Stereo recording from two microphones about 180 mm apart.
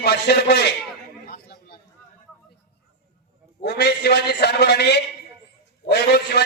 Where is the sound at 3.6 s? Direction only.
65° left (ahead or behind).